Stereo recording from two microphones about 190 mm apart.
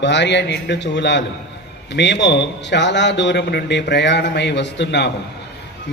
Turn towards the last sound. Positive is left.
turn(degrees=65)  # may be behind; listen again after turning